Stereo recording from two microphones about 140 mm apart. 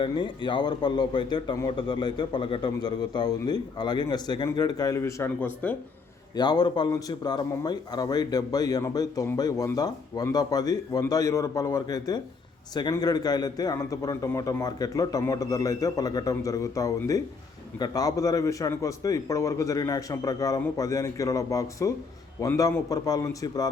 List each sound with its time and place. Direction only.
0.0 s a man's voice: 35° left (ahead or behind); by 5.5 s 20° left (ahead or behind)
6.3 s a man's voice: 30° left (ahead or behind)